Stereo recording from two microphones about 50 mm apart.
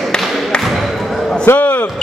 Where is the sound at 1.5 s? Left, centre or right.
Left.